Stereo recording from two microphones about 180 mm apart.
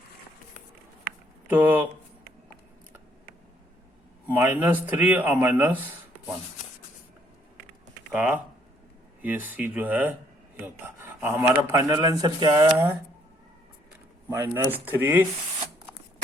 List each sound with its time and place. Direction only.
1.5 s speech: 10° right (ahead or behind)
4.3 s speech: 10° right (ahead or behind)
8.1 s speech: 10° right (ahead or behind)
10.8 s a sound: 10° right (ahead or behind)
11.7 s speech: 15° right (ahead or behind)
14.3 s speech: 15° right (ahead or behind)